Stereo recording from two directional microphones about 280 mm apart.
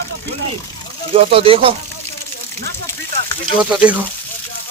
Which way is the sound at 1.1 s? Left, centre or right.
Right.